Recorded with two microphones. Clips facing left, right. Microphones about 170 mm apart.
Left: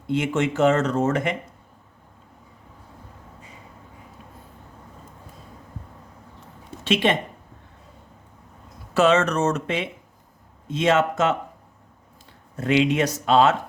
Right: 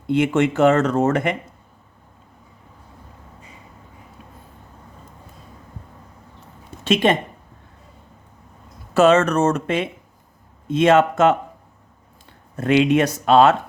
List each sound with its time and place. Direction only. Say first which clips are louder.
0.1 s speech: right 5 dB; 60° right (ahead or behind)
6.8 s speech: right 4 dB; 45° right (ahead or behind)
9.0 s speech: right 4 dB; 50° right (ahead or behind)
12.5 s speech: right 4 dB; 55° right (ahead or behind)